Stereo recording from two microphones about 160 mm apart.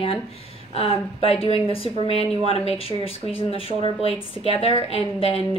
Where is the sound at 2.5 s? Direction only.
35° left (ahead or behind).